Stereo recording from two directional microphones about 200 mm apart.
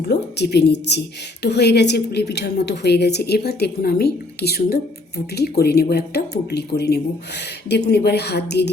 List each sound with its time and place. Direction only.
0.1 s a woman's voice: 55° left (ahead or behind)